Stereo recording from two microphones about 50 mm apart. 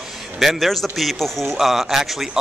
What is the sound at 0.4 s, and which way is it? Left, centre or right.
A man's voice, centre.